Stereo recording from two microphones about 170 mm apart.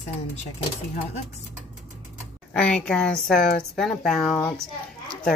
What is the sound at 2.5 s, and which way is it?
Speech, 5° left (ahead or behind).